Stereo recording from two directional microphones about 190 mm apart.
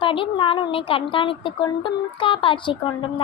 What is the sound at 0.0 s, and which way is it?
Speech, 25° left (ahead or behind).